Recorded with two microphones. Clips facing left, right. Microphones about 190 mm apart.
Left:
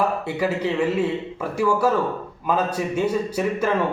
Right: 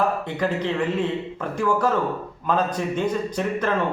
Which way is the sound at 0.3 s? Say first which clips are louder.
Left 1 dB; 10° left (ahead or behind).